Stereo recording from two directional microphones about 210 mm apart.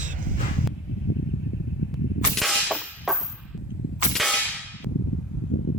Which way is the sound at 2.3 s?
Centre (ahead or behind).